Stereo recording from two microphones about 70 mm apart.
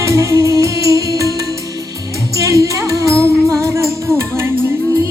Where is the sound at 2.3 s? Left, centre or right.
Right.